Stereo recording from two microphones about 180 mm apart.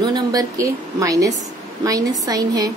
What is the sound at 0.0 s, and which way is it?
A woman's voice, 20° right (ahead or behind).